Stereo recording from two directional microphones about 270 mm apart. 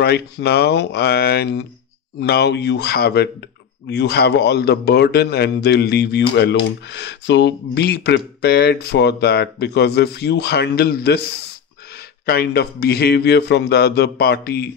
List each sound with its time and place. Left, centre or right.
0.0 s a man's voice: left
12.3 s a man's voice: left